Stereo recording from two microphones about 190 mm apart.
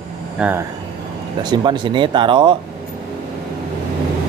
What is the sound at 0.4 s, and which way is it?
Speech, 10° right (ahead or behind).